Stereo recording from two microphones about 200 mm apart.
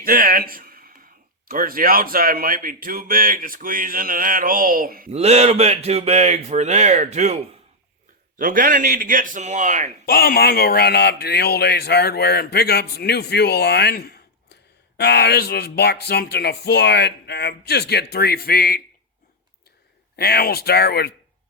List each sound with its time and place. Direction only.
0.0 s a sound: 45° right (ahead or behind)
1.5 s speech: 45° right (ahead or behind)
5.1 s speech: 30° right (ahead or behind)
8.4 s speech: 45° right (ahead or behind)
10.1 s speech: 50° left (ahead or behind)
20.1 s speech: 50° left (ahead or behind)